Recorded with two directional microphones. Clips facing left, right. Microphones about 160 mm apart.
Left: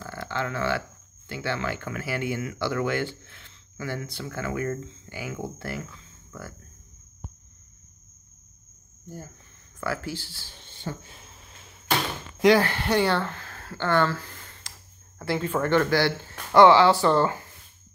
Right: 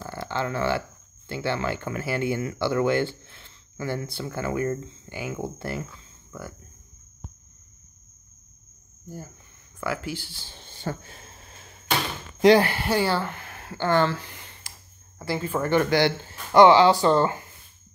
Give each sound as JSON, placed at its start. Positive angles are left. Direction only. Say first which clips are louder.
{"t": 0.0, "sound": "speech", "louder": "right 2 dB", "side_deg": -30}
{"t": 9.8, "sound": "speech", "louder": "right 1 dB", "side_deg": -15}
{"t": 10.5, "sound": "a sound", "louder": "right 3 dB", "side_deg": -40}
{"t": 12.5, "sound": "speech", "louder": "right 1 dB", "side_deg": -10}
{"t": 15.1, "sound": "speech", "louder": "left 1 dB", "side_deg": -5}
{"t": 15.8, "sound": "speech", "louder": "right 2 dB", "side_deg": -20}